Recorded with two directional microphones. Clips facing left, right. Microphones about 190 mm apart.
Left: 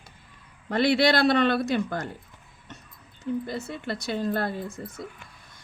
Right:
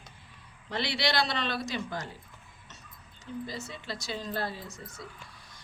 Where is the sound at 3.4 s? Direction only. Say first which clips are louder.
Left 7 dB; 55° left (ahead or behind).